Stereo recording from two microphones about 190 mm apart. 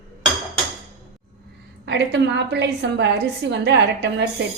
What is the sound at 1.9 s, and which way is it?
A woman's voice, 65° right (ahead or behind).